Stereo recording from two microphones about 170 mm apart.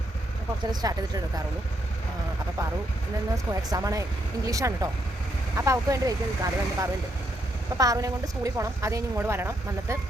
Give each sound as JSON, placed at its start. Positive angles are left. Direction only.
{"t": 0.7, "sound": "a woman's voice", "side_deg": -20}
{"t": 3.3, "sound": "a woman's voice", "side_deg": -20}